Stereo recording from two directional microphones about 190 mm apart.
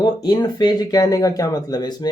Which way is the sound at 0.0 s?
20° left (ahead or behind).